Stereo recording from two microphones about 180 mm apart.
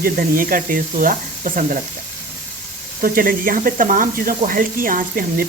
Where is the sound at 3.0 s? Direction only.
50° right (ahead or behind).